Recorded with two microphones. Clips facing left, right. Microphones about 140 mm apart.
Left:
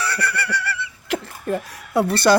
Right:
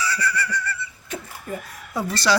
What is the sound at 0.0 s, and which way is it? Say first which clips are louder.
Speech: left 1 dB; 65° left (ahead or behind).